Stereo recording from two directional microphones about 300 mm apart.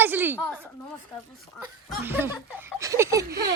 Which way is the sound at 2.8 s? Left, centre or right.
Centre.